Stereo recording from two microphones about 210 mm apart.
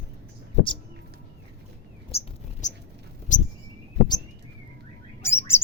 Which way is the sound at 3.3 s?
35° left (ahead or behind).